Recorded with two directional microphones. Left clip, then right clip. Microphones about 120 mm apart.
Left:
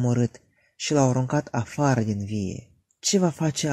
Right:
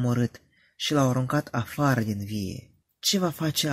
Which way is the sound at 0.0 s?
35° left (ahead or behind).